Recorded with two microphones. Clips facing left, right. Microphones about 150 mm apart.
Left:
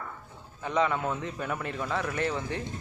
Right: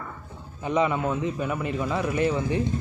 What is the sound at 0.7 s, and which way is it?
A man's voice, 10° right (ahead or behind).